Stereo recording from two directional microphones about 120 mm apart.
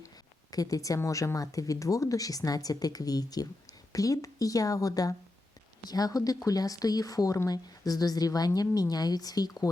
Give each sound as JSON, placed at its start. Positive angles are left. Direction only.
{"t": 0.5, "sound": "speech", "side_deg": 30}